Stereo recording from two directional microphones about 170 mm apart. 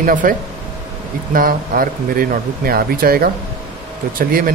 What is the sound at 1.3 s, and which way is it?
Speech, 60° right (ahead or behind).